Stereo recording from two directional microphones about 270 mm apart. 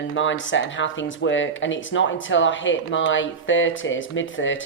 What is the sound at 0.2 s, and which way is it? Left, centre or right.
Speech, left.